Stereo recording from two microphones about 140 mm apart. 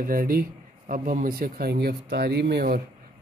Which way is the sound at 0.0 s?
90° right.